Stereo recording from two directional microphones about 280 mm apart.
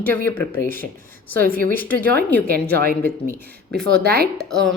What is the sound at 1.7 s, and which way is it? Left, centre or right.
Speech, centre.